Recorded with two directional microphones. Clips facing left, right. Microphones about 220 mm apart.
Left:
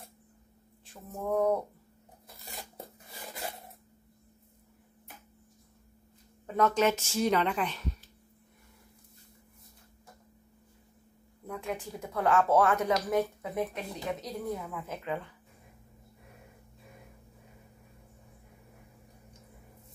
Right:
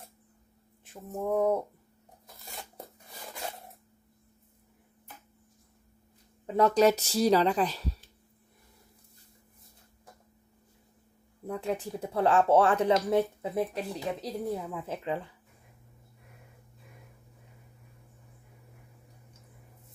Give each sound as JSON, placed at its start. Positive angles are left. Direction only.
{"t": 1.1, "sound": "speech", "side_deg": -15}
{"t": 6.4, "sound": "speech", "side_deg": -30}
{"t": 11.4, "sound": "speech", "side_deg": -35}